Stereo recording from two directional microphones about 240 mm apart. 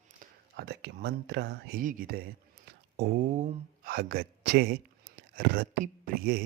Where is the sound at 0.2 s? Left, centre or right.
Right.